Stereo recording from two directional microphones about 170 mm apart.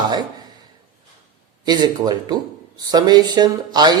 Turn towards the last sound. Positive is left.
turn(degrees=-25)  # may be behind; listen again after turning